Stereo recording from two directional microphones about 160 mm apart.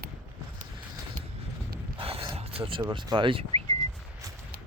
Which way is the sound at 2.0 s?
35° right (ahead or behind).